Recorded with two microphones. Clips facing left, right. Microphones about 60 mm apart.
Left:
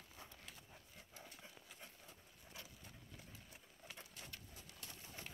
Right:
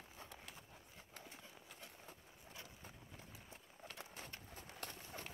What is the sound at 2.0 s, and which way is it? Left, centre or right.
Vehicle, right.